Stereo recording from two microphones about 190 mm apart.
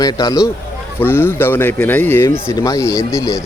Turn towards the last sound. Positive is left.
turn(degrees=15)  # may be behind; listen again after turning